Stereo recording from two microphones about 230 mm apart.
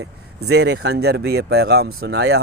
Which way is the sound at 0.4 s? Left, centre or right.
Right.